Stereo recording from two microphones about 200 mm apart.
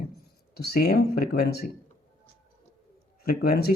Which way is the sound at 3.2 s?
50° left (ahead or behind).